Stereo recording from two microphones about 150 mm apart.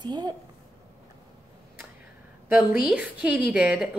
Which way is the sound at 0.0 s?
30° right (ahead or behind).